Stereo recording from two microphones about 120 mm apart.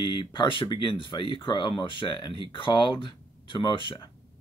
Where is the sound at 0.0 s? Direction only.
40° left (ahead or behind).